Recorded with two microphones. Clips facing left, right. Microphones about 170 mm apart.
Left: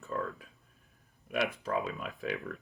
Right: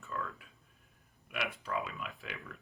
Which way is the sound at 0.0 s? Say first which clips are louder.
Left 5 dB; 40° left (ahead or behind).